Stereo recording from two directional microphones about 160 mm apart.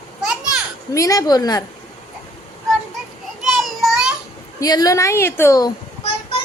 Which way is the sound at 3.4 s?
Centre (ahead or behind).